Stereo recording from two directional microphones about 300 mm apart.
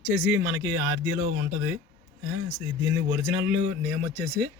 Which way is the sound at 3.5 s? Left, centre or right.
Centre.